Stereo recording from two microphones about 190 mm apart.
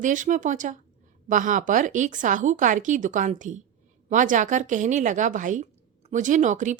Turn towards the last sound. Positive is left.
turn(degrees=-40)  # may be behind; listen again after turning